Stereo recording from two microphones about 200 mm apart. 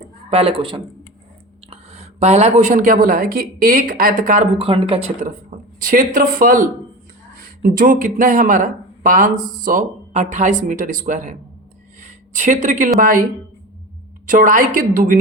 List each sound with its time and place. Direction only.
0.3 s a woman's voice: 30° right (ahead or behind)
4.5 s speech: 25° right (ahead or behind)
5.2 s a woman's voice: 40° right (ahead or behind)
14.3 s a woman's voice: 40° right (ahead or behind)